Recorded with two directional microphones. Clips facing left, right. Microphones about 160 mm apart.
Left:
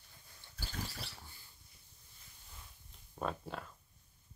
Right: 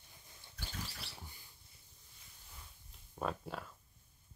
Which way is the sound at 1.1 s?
15° right (ahead or behind).